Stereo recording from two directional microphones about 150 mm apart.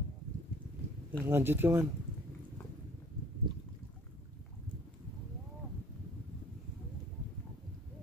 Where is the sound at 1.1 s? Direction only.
15° right (ahead or behind).